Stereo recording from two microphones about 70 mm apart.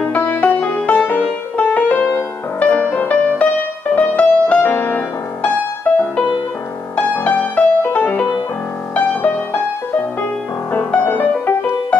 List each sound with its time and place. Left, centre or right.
0.0 s music: left
7.0 s music: left
10.7 s music: centre